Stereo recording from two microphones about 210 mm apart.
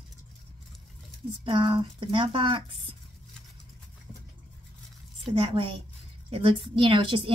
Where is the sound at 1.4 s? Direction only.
25° right (ahead or behind).